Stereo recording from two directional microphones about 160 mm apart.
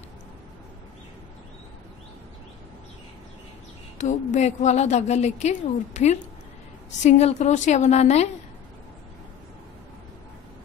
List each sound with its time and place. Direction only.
4.0 s a woman's voice: 50° left (ahead or behind)